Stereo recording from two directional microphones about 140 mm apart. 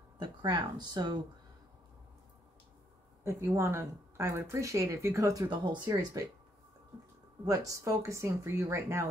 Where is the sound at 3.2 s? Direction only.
20° right (ahead or behind).